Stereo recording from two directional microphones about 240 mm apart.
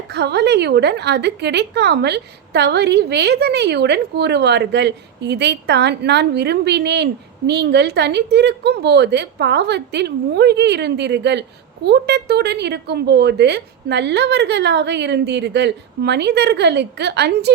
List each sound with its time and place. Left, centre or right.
0.1 s a woman's voice: right